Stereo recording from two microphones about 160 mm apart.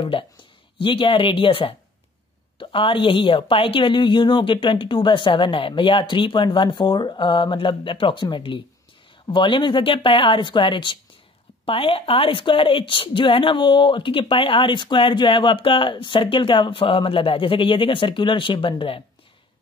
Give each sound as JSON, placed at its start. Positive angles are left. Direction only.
{"t": 0.0, "sound": "a woman's voice", "side_deg": 35}